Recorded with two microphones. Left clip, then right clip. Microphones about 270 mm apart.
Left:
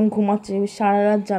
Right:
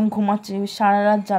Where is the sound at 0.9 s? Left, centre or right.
Right.